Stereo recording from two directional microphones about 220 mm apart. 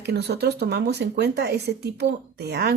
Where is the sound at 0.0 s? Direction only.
50° right (ahead or behind).